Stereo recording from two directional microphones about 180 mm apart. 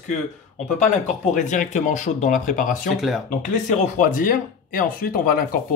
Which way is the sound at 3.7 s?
45° left (ahead or behind).